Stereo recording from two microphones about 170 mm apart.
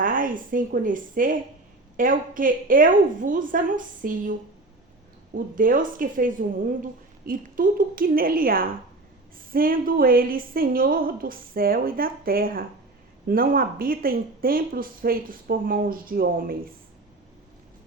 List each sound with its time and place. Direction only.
0.0 s a woman's voice: 55° right (ahead or behind)